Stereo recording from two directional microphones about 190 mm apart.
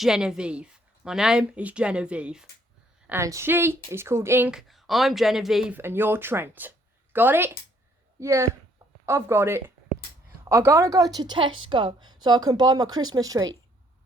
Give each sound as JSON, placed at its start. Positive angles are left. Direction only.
{"t": 0.0, "sound": "a woman's voice", "side_deg": -5}
{"t": 3.1, "sound": "speech", "side_deg": -15}